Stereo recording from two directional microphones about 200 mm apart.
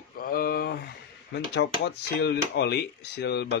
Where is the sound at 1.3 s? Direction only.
60° left (ahead or behind).